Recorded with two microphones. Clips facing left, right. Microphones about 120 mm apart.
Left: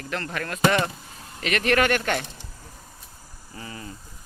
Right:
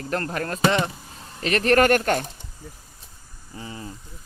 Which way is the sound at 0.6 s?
20° right (ahead or behind).